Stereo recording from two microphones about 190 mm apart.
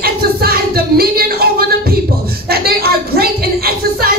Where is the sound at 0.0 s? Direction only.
55° right (ahead or behind).